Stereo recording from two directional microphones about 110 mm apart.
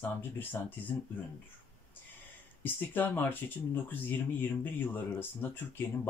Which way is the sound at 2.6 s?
15° left (ahead or behind).